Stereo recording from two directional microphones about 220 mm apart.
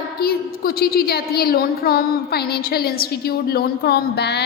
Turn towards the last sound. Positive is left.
turn(degrees=50)  # may be behind; listen again after turning